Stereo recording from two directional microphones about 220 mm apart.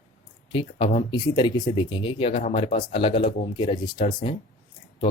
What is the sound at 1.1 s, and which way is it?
Speech, 20° left (ahead or behind).